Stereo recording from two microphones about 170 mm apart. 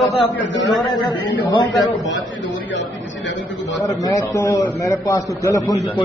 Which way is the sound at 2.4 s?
90° left.